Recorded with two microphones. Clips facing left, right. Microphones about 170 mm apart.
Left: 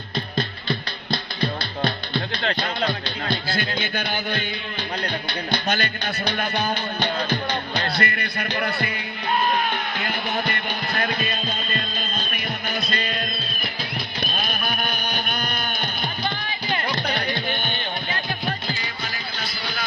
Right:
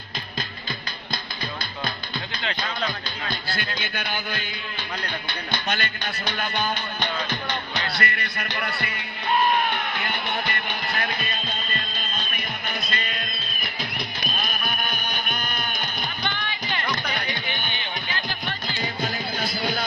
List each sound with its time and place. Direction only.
3.5 s speech: 45° left (ahead or behind)
5.6 s speech: 40° left (ahead or behind)
7.8 s speech: 40° left (ahead or behind)
10.0 s music: 40° left (ahead or behind)
12.9 s music: 40° left (ahead or behind)
14.3 s music: 45° left (ahead or behind)
17.2 s music: 45° left (ahead or behind)
18.8 s music: 45° right (ahead or behind)